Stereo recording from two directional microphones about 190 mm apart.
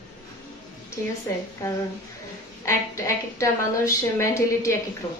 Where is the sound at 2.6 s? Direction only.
15° left (ahead or behind).